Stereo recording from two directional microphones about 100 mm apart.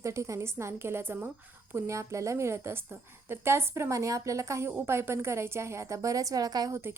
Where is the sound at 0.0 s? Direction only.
30° right (ahead or behind).